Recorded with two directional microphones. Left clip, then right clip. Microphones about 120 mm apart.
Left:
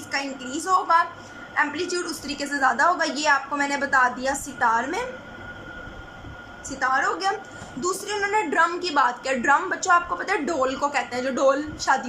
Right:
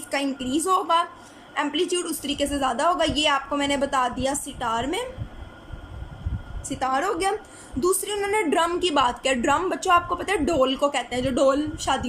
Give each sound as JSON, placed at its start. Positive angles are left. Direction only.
{"t": 0.1, "sound": "a woman's voice", "side_deg": -40}
{"t": 6.7, "sound": "a woman's voice", "side_deg": -30}